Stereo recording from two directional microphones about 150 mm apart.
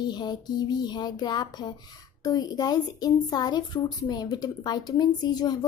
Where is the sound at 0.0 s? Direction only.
30° left (ahead or behind).